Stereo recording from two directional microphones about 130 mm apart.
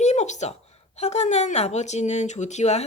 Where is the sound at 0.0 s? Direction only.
60° left (ahead or behind).